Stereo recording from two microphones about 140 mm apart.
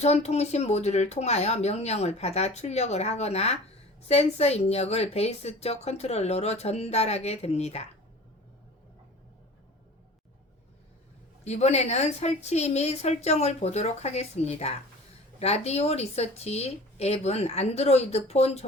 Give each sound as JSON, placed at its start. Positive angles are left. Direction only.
{"t": 0.0, "sound": "a woman's voice", "side_deg": 50}
{"t": 11.4, "sound": "a woman's voice", "side_deg": 50}